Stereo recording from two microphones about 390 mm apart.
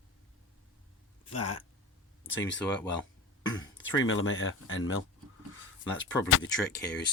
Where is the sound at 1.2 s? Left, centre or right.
Left.